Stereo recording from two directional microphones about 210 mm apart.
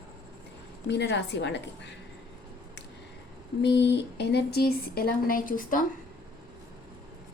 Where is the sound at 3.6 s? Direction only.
55° left (ahead or behind); by 5.8 s 40° left (ahead or behind).